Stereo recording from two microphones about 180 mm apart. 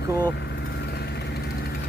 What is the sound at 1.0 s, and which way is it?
Vehicle, 65° left (ahead or behind).